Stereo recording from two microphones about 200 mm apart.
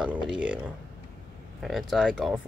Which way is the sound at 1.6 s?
Centre (ahead or behind).